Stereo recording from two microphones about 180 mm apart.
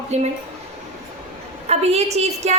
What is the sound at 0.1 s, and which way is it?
Speech, 35° right (ahead or behind).